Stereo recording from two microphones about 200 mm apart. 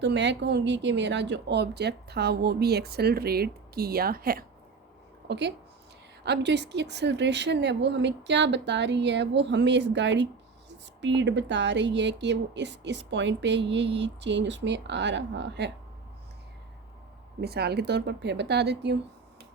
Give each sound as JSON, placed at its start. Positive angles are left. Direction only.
{"t": 0.0, "sound": "speech", "side_deg": -60}
{"t": 5.3, "sound": "speech", "side_deg": -60}
{"t": 17.4, "sound": "speech", "side_deg": -55}